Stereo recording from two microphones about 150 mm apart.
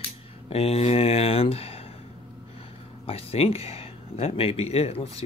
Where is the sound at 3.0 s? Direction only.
40° left (ahead or behind).